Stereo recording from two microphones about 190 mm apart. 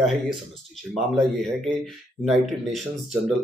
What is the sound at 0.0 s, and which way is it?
Speech, centre (ahead or behind).